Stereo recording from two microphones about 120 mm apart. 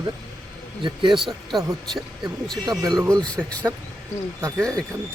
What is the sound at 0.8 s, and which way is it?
Speech, 40° right (ahead or behind).